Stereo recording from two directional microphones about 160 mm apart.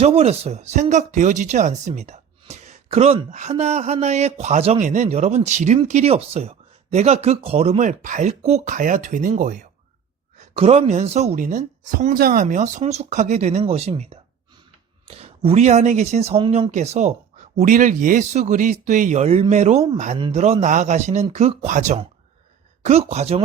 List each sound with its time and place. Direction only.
0.0 s speech: 40° right (ahead or behind); by 9.6 s 60° right (ahead or behind)
10.5 s speech: 40° right (ahead or behind)
17.6 s speech: 55° right (ahead or behind)